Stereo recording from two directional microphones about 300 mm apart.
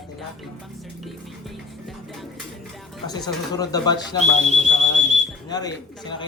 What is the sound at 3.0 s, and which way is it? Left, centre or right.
A man's voice, centre.